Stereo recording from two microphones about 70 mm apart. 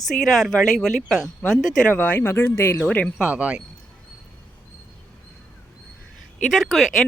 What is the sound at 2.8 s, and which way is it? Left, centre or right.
Speech, centre.